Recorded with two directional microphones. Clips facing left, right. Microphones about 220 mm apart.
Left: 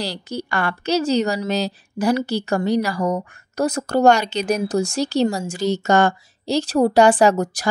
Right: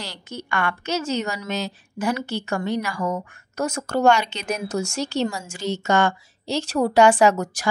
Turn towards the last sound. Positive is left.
turn(degrees=35)  # may be behind; listen again after turning